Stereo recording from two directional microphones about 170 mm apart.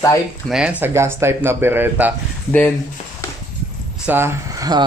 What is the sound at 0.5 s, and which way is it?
Speech, 5° right (ahead or behind).